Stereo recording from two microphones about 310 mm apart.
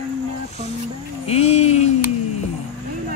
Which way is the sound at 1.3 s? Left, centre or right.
Centre.